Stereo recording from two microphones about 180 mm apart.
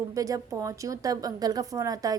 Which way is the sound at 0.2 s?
20° right (ahead or behind).